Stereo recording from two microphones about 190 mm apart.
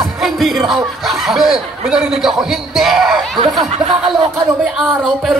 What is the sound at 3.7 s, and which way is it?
Speech, 35° right (ahead or behind).